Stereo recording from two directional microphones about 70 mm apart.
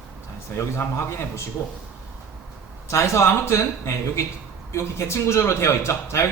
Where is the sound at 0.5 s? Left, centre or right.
Left.